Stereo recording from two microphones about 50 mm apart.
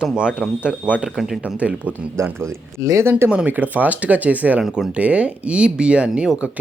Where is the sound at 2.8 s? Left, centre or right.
Right.